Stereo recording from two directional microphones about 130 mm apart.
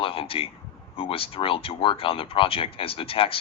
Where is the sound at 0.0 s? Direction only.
45° left (ahead or behind).